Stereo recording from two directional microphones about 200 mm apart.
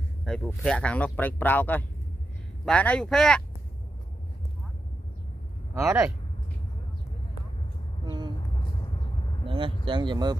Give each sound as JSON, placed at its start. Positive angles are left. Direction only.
{"t": 0.2, "sound": "speech", "side_deg": 0}
{"t": 5.8, "sound": "a man's voice", "side_deg": -10}
{"t": 8.0, "sound": "a sound", "side_deg": -20}
{"t": 8.5, "sound": "vehicle", "side_deg": 25}
{"t": 9.8, "sound": "speech", "side_deg": -25}